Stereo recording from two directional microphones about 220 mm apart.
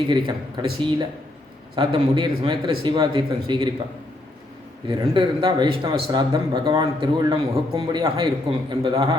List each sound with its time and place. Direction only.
0.1 s speech: 20° right (ahead or behind)
1.7 s speech: 20° right (ahead or behind)
4.9 s speech: 20° right (ahead or behind)